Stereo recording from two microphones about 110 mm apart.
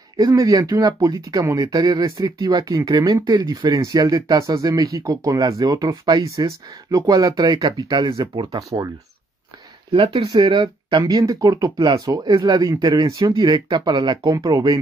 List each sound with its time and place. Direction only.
0.2 s speech: 35° right (ahead or behind)
10.6 s speech: 40° right (ahead or behind)